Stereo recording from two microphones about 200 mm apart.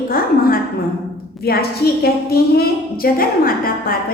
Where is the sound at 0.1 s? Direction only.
45° left (ahead or behind).